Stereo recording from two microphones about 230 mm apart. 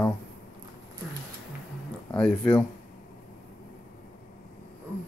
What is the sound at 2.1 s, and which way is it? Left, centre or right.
Speech, centre.